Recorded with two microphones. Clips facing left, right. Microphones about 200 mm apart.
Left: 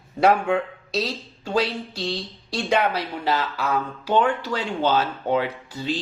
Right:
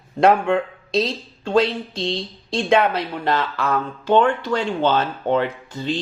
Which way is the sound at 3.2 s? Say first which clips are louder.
Right 2 dB; 5° left (ahead or behind).